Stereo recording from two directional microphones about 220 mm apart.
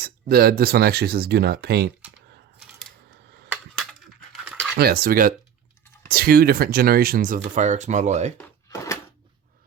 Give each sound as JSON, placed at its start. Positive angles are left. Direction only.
{"t": 0.0, "sound": "speech", "side_deg": -45}
{"t": 3.8, "sound": "a sound", "side_deg": 0}
{"t": 4.8, "sound": "speech", "side_deg": -45}
{"t": 8.4, "sound": "drawer open or close", "side_deg": 15}